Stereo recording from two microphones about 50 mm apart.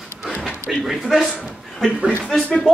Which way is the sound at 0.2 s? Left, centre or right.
Centre.